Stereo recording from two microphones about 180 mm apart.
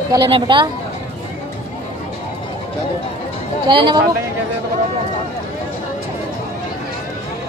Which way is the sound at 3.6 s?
25° right (ahead or behind).